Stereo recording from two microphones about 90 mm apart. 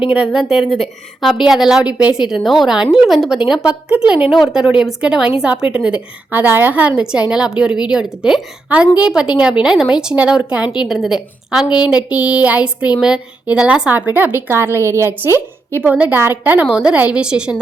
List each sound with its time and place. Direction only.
0.0 s a woman's voice: 10° right (ahead or behind)